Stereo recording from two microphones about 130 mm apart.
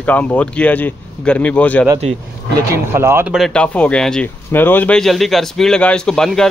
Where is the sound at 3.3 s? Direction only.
Centre (ahead or behind).